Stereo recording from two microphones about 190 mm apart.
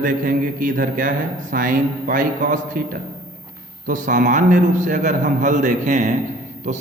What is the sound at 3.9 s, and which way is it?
A man's voice, 40° right (ahead or behind).